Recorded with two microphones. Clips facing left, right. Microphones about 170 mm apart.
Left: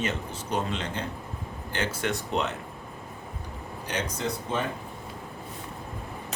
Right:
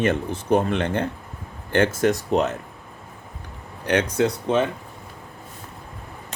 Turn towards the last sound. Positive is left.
turn(degrees=-75)  # may be behind; listen again after turning